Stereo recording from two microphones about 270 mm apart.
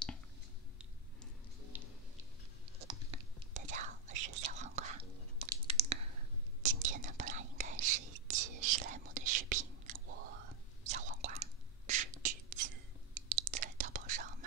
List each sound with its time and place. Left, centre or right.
0.7 s music: centre
2.9 s whispering: right